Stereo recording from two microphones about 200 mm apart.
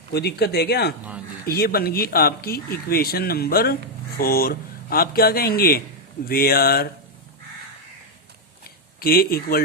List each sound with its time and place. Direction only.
0.1 s speech: 55° left (ahead or behind)
9.0 s speech: 50° left (ahead or behind)